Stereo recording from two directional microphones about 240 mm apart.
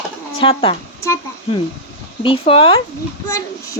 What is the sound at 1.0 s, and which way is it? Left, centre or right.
Speech, centre.